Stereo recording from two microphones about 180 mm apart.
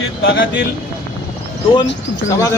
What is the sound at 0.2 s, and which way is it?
Speech, 75° left (ahead or behind).